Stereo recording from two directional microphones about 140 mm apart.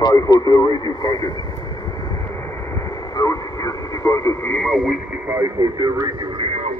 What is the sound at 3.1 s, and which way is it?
Radio, 25° left (ahead or behind).